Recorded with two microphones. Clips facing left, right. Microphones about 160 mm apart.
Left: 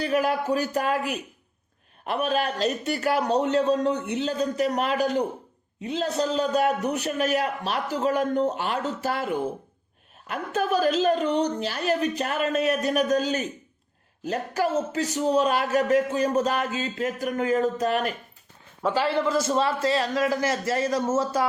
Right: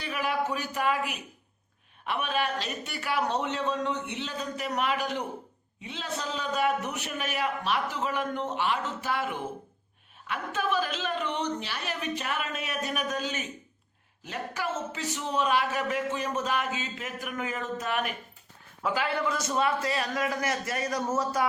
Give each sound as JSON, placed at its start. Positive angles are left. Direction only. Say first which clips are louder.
{"t": 0.0, "sound": "a man's voice", "louder": "left 6 dB", "side_deg": 40}